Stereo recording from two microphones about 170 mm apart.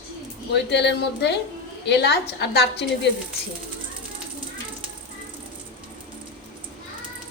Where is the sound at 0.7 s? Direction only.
90° left.